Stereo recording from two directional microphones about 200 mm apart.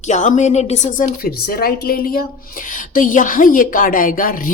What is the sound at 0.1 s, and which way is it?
A woman's voice, 35° left (ahead or behind).